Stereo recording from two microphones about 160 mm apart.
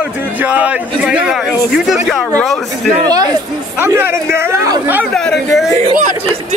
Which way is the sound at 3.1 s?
25° right (ahead or behind).